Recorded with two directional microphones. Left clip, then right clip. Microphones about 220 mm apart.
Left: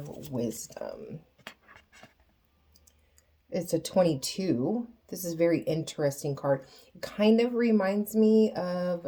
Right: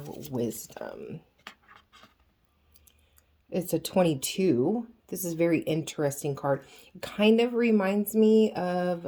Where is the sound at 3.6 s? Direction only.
35° right (ahead or behind).